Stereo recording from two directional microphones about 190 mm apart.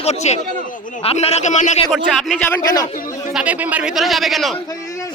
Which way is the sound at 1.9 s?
Centre (ahead or behind).